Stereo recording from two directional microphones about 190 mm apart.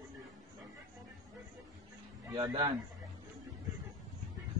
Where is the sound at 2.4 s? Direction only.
25° right (ahead or behind).